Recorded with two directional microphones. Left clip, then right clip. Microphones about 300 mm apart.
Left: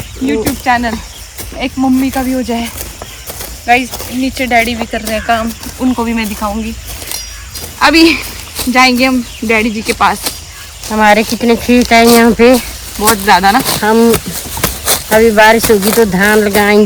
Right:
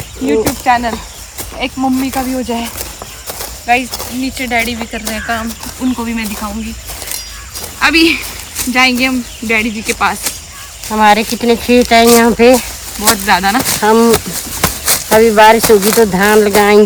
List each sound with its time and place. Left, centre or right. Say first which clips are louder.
0.3 s speech: right 1 dB; right; by 6.5 s centre
7.8 s speech: left 2 dB; centre
10.8 s speech: left 1 dB; centre
13.2 s speech: left 5 dB; centre
13.8 s speech: right 1 dB; centre
14.6 s clip-clop: right 1 dB; right
15.1 s speech: even; centre